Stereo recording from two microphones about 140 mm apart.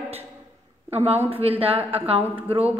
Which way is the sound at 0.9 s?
45° right (ahead or behind).